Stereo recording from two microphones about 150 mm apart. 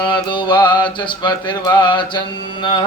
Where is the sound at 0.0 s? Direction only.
30° left (ahead or behind).